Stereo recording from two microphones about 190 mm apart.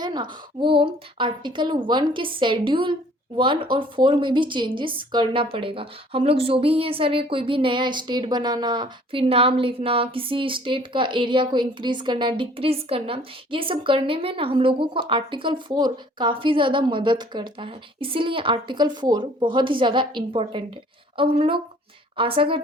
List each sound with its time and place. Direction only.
0.0 s speech: 20° right (ahead or behind)